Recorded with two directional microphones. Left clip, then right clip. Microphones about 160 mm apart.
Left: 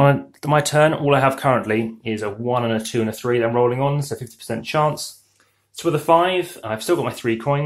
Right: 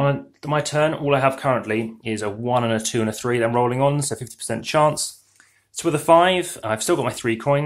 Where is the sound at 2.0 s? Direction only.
20° right (ahead or behind).